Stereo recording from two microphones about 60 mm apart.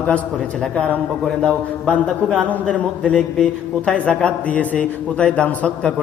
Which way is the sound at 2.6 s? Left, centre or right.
Centre.